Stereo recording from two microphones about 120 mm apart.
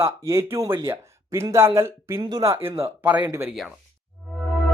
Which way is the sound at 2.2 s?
35° right (ahead or behind).